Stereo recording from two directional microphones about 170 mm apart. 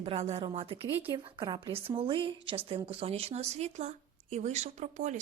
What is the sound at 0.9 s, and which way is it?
Speech, 10° right (ahead or behind).